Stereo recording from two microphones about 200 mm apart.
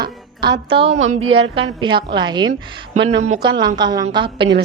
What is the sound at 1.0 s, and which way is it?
Speech, 90° right.